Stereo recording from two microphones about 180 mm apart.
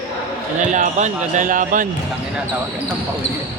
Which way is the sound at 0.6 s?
45° right (ahead or behind).